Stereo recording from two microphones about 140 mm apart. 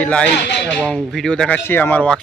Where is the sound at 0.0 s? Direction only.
10° left (ahead or behind).